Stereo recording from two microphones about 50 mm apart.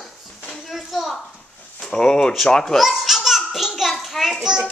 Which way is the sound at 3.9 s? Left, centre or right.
Centre.